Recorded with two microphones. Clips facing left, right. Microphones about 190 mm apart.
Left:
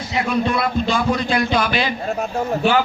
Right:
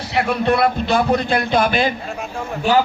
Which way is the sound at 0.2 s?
60° right (ahead or behind).